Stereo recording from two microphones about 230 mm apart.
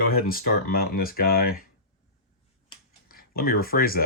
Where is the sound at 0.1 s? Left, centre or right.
Left.